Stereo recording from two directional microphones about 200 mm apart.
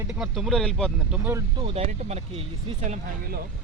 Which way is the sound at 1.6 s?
30° right (ahead or behind).